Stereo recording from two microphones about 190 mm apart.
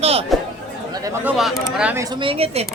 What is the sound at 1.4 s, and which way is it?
Speech, centre (ahead or behind).